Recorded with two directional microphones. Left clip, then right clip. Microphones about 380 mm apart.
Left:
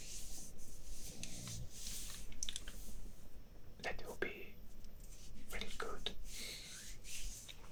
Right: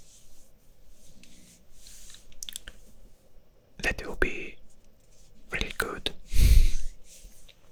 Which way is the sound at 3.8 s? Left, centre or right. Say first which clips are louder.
Right 15 dB; right.